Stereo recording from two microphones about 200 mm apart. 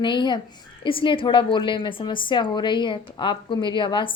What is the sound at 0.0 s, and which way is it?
A woman's voice, 20° left (ahead or behind).